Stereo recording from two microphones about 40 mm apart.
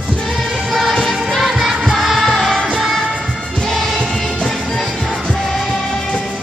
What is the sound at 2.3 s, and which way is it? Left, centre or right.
Music, centre.